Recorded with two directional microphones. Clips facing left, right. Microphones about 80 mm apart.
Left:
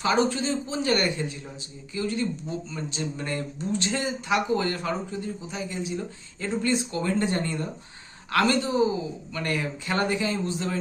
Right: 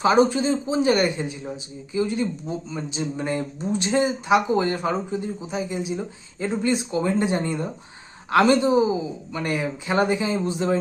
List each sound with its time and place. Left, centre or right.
0.0 s speech: right